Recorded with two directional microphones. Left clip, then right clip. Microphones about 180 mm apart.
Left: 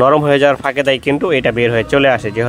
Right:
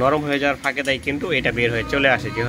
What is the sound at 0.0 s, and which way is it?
Speech, 45° left (ahead or behind).